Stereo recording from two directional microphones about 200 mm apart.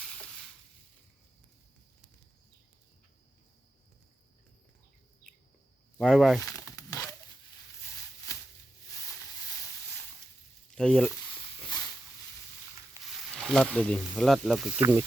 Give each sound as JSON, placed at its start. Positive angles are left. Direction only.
{"t": 6.0, "sound": "speech", "side_deg": 0}
{"t": 6.4, "sound": "a sound", "side_deg": 15}
{"t": 8.3, "sound": "a sound", "side_deg": 15}
{"t": 10.8, "sound": "frying", "side_deg": 0}
{"t": 13.1, "sound": "speech", "side_deg": 0}
{"t": 14.8, "sound": "speech", "side_deg": -15}